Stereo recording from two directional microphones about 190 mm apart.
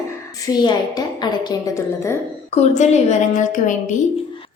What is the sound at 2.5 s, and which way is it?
A woman's voice, 35° left (ahead or behind).